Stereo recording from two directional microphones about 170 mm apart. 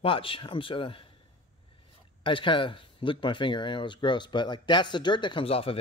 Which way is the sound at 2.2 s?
30° left (ahead or behind).